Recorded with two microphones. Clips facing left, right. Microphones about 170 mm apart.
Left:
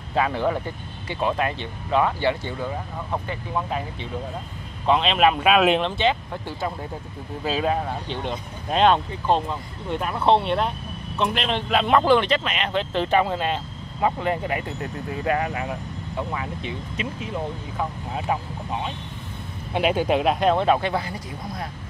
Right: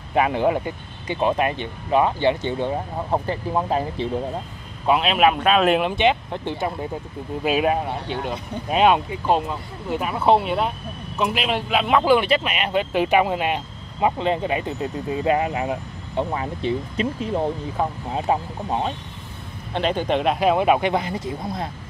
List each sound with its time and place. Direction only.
0.1 s speech: 15° right (ahead or behind); by 4.1 s 35° right (ahead or behind)
4.8 s speech: 5° right (ahead or behind)
5.8 s speech: 15° right (ahead or behind); by 18.9 s 35° right (ahead or behind)
19.7 s speech: 10° left (ahead or behind); by 21.6 s 20° right (ahead or behind)